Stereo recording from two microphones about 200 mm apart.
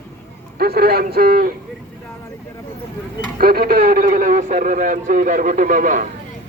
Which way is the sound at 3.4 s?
50° right (ahead or behind).